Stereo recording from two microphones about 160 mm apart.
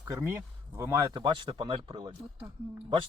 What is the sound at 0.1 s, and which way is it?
Speech, 15° right (ahead or behind).